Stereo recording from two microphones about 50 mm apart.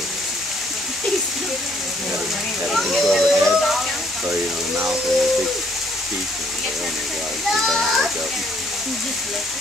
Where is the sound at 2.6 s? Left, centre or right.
Centre.